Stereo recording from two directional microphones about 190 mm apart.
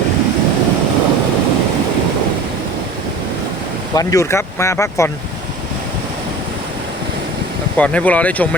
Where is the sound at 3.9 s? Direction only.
15° left (ahead or behind).